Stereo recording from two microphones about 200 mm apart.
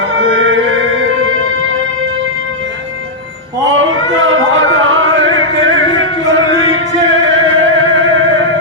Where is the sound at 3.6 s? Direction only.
75° right (ahead or behind).